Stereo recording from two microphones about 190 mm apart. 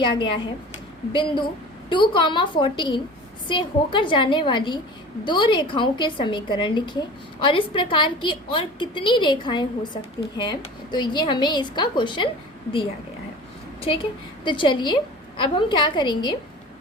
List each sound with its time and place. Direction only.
1.1 s a woman's voice: 25° left (ahead or behind)
13.8 s a woman's voice: 30° left (ahead or behind)